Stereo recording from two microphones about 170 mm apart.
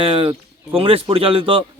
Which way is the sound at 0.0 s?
35° right (ahead or behind).